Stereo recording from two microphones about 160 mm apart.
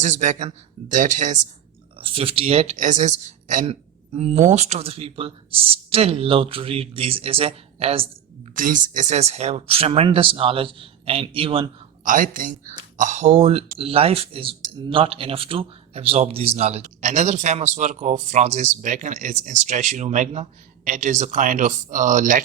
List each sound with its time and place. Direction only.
0.0 s speech: 50° right (ahead or behind)
2.0 s speech: 35° right (ahead or behind); by 3.7 s 50° right (ahead or behind)
3.7 s speech: 40° right (ahead or behind)
8.5 s speech: 55° right (ahead or behind); by 11.7 s 35° right (ahead or behind)
12.0 s speech: 55° right (ahead or behind)